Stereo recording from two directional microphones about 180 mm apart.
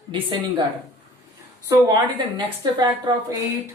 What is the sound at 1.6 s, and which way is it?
Speech, 25° right (ahead or behind).